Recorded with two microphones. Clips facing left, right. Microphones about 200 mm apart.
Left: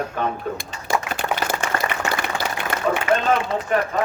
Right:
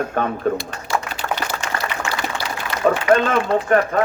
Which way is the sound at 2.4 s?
50° left (ahead or behind).